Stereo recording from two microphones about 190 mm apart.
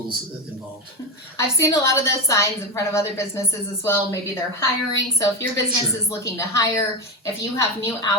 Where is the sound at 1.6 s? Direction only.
15° left (ahead or behind).